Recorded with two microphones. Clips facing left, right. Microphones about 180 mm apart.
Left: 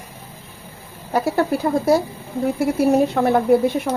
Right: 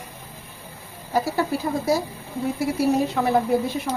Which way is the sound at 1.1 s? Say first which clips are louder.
Left 4 dB; 60° left (ahead or behind).